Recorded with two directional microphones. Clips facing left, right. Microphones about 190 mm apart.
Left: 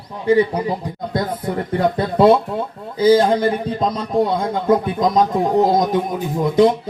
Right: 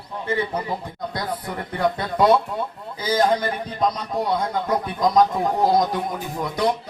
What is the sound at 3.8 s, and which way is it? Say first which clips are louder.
A man's voice: left 2 dB; 25° left (ahead or behind).